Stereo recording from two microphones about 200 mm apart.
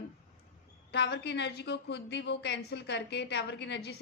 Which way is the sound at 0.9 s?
60° left (ahead or behind).